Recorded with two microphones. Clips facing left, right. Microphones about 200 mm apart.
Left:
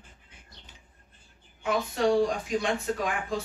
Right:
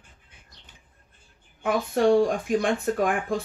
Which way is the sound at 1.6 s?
55° right (ahead or behind).